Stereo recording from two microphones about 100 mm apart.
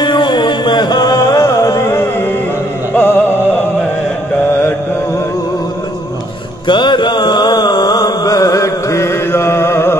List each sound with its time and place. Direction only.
0.0 s music: 50° left (ahead or behind); by 3.2 s 20° left (ahead or behind)
6.7 s mantra: 55° left (ahead or behind); by 9.9 s 25° left (ahead or behind)